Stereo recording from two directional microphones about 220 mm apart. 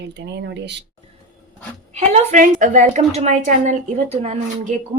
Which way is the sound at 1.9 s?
30° right (ahead or behind).